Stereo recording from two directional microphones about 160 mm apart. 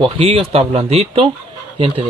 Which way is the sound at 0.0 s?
35° right (ahead or behind).